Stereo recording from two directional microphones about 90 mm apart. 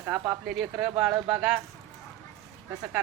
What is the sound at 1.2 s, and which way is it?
Speech, 20° right (ahead or behind).